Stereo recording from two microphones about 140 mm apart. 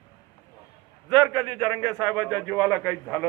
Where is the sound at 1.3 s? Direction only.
30° right (ahead or behind).